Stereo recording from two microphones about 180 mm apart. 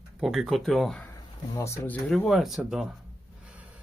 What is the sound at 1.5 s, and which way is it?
Speech, 15° left (ahead or behind).